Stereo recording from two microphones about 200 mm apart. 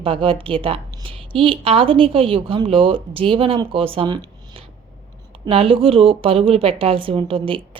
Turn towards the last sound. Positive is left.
turn(degrees=-25)  # may be behind; listen again after turning